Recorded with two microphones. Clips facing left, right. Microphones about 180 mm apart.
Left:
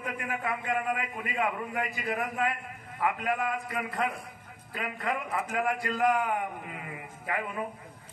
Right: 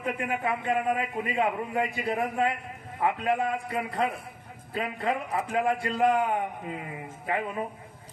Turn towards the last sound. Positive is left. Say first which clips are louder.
# right 4 dB
turn(degrees=-30)  # may be behind; listen again after turning